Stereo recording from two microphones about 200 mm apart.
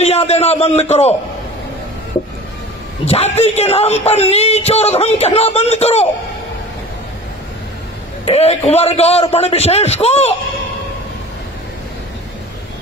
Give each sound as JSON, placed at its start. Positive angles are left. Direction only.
{"t": 0.0, "sound": "a man's voice", "side_deg": 30}
{"t": 3.1, "sound": "speech", "side_deg": 30}
{"t": 8.3, "sound": "speech", "side_deg": 30}